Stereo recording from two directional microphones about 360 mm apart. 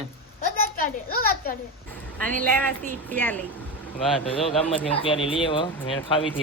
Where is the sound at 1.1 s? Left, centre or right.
Left.